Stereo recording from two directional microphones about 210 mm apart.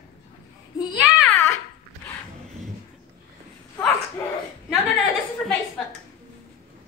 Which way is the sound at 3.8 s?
10° left (ahead or behind).